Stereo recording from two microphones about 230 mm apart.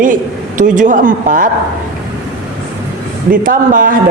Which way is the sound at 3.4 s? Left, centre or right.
Right.